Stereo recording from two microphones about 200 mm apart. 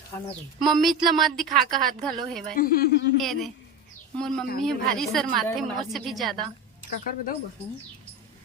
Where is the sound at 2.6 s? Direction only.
45° left (ahead or behind).